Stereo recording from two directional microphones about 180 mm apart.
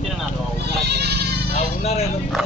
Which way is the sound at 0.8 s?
65° right (ahead or behind).